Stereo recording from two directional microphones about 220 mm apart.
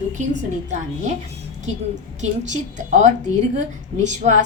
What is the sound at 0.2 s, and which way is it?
Speech, 35° right (ahead or behind).